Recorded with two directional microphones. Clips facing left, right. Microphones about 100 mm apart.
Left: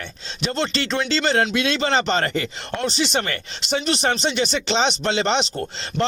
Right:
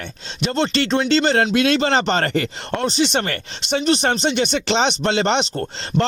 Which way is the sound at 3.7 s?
40° right (ahead or behind).